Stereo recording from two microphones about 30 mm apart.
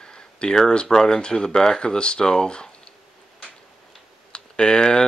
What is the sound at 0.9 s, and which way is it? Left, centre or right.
Speech, left.